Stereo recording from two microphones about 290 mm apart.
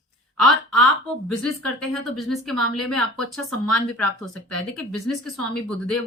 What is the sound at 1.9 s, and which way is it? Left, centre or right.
Speech, centre.